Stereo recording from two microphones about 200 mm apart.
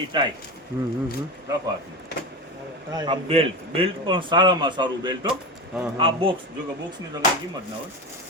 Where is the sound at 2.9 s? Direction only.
20° right (ahead or behind).